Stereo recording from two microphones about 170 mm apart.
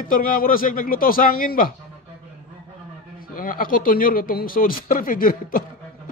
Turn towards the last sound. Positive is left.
turn(degrees=55)  # may be behind; listen again after turning